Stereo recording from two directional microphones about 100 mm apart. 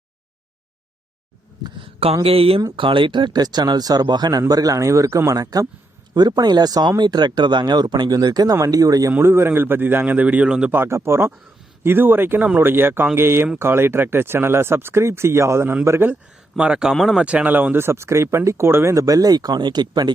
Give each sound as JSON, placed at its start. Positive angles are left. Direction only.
{"t": 1.6, "sound": "a sound", "side_deg": -65}
{"t": 2.2, "sound": "speech", "side_deg": -70}
{"t": 2.7, "sound": "speech", "side_deg": -55}
{"t": 9.1, "sound": "speech", "side_deg": -25}
{"t": 10.8, "sound": "speech", "side_deg": -25}
{"t": 16.6, "sound": "a man's voice", "side_deg": -10}
{"t": 17.2, "sound": "speech", "side_deg": -15}